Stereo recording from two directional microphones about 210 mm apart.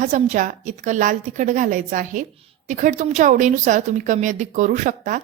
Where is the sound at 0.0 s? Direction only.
35° right (ahead or behind).